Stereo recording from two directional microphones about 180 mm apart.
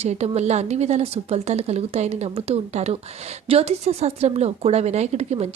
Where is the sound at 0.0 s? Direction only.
35° right (ahead or behind).